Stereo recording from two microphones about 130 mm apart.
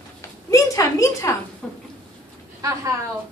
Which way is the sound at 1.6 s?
5° left (ahead or behind).